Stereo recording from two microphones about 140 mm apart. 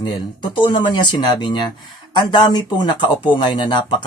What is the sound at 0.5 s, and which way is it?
Speech, 35° left (ahead or behind).